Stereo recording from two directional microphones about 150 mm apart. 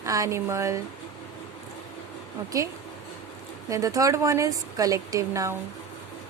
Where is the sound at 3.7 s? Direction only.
20° right (ahead or behind).